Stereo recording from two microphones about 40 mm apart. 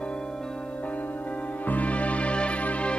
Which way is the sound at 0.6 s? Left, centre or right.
Left.